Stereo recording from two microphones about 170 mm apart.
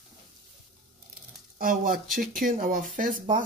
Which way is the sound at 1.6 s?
55° right (ahead or behind).